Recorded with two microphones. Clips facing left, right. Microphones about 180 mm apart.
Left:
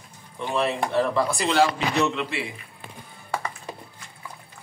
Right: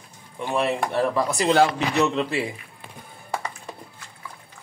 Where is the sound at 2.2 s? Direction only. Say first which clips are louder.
Right 5 dB; 40° right (ahead or behind).